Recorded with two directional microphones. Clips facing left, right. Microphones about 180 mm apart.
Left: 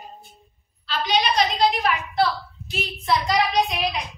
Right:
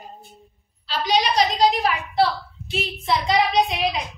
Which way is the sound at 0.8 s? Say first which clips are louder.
Right 1 dB; 40° right (ahead or behind).